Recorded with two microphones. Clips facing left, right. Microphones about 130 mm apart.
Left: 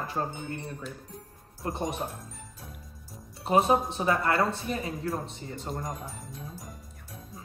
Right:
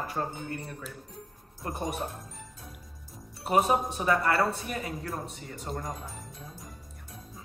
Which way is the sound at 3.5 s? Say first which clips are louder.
Left 2 dB; 25° left (ahead or behind).